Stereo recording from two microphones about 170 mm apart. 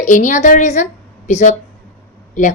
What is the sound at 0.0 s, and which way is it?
Speech, 45° left (ahead or behind).